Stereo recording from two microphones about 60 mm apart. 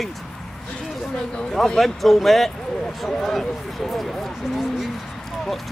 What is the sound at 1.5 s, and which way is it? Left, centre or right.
Speech, centre.